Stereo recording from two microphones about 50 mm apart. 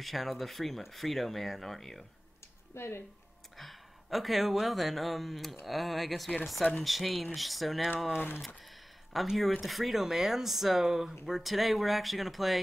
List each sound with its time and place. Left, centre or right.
0.0 s speech: centre
2.7 s speech: left
3.5 s speech: centre
9.1 s speech: centre